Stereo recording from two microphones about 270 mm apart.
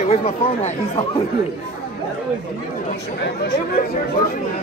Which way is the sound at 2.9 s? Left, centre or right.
Left.